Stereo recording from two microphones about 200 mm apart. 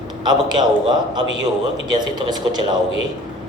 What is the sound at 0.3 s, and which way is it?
A man's voice, 20° right (ahead or behind).